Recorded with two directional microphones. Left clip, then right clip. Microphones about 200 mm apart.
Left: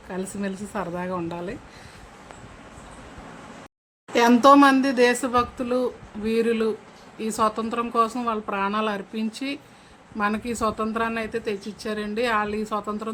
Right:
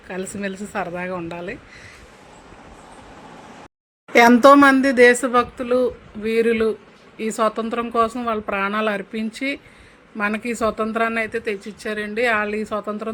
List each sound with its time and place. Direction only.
0.1 s speech: 10° right (ahead or behind)
4.4 s speech: 15° right (ahead or behind)